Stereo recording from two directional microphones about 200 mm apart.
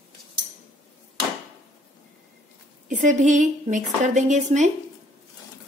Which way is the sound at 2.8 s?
40° right (ahead or behind).